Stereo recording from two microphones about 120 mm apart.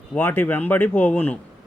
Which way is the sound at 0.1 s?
15° left (ahead or behind).